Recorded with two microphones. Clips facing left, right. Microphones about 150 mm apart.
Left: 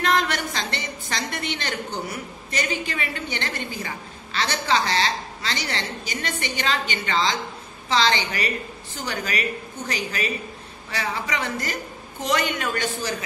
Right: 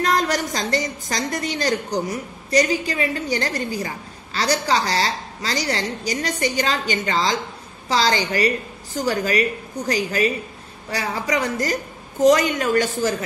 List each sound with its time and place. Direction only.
0.0 s a woman's voice: 40° right (ahead or behind)